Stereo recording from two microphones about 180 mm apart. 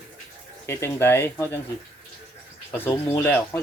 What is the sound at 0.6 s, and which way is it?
Speech, 15° left (ahead or behind).